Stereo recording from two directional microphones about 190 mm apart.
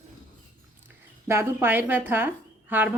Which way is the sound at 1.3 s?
10° right (ahead or behind).